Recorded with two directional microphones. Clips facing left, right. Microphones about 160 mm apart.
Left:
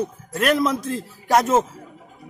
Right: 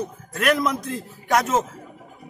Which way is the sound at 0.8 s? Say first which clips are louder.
Left 3 dB; 30° left (ahead or behind).